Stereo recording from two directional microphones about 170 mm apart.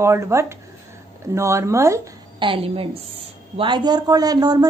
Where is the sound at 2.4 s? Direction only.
30° right (ahead or behind).